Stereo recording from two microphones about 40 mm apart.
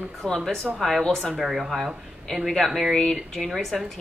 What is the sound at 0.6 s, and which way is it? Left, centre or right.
Speech, centre.